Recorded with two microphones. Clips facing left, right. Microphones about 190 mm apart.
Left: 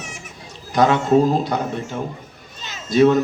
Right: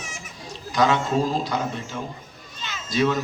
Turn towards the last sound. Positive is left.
turn(degrees=60)  # may be behind; listen again after turning